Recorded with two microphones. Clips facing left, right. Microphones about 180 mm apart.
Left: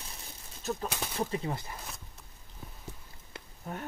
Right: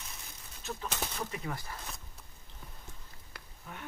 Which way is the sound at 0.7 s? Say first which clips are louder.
Left 7 dB; 40° left (ahead or behind).